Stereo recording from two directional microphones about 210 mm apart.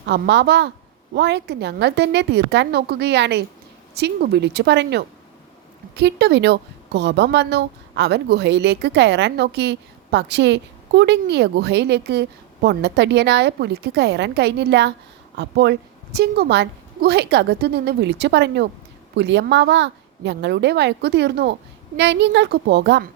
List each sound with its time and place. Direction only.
0.0 s a woman's voice: 55° right (ahead or behind)